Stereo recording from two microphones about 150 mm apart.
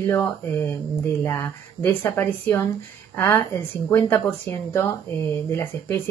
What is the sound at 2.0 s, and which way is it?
A woman's voice, 15° left (ahead or behind).